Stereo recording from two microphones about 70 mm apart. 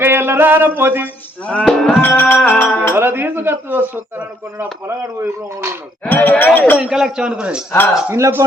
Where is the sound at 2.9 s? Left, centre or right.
Right.